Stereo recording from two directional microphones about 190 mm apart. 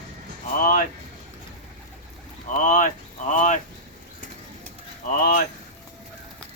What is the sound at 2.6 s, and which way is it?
Speech, 45° left (ahead or behind).